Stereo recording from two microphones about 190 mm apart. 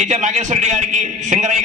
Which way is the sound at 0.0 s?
40° right (ahead or behind).